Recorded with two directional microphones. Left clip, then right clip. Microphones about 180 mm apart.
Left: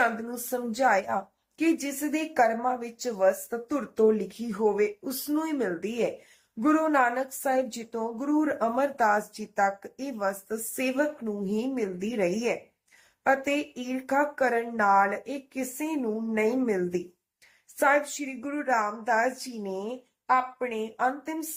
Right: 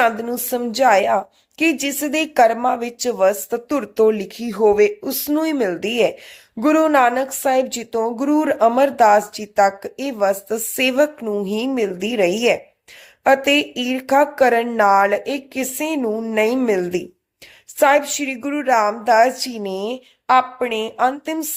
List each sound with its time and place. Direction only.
0.0 s a woman's voice: 45° right (ahead or behind)